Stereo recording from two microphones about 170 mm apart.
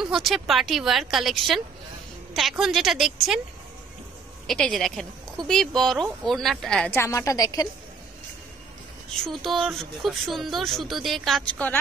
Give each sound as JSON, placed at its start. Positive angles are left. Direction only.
{"t": 0.0, "sound": "speech", "side_deg": 0}
{"t": 4.5, "sound": "speech", "side_deg": 5}
{"t": 6.9, "sound": "a woman's voice", "side_deg": 15}
{"t": 9.1, "sound": "speech", "side_deg": 0}